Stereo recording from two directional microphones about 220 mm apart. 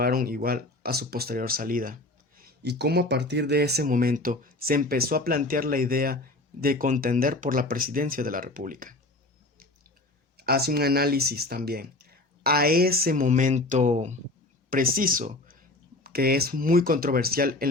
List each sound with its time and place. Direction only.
0.0 s speech: 40° right (ahead or behind)
2.4 s speech: 50° right (ahead or behind)
10.3 s speech: 45° right (ahead or behind)